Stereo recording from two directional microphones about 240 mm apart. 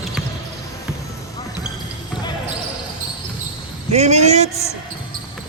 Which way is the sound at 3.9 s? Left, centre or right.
Right.